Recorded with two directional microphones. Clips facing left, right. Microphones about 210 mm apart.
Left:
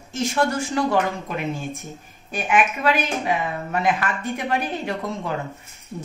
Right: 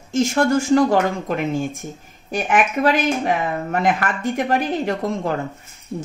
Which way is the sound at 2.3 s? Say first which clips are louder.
Right 3 dB; 45° right (ahead or behind).